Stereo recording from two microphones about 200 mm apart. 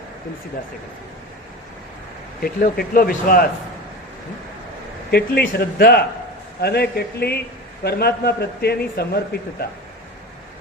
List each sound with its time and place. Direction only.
2.4 s a man's voice: 45° left (ahead or behind)
5.1 s a man's voice: 55° left (ahead or behind)